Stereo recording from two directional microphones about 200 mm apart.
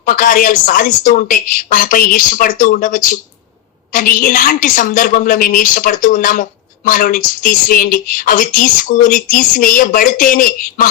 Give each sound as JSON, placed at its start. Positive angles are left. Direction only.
{"t": 0.0, "sound": "a woman's voice", "side_deg": 45}